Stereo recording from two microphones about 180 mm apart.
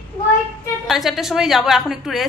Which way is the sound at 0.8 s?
Centre (ahead or behind).